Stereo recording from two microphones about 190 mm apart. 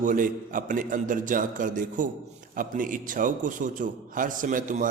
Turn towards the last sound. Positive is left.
turn(degrees=-45)  # may be behind; listen again after turning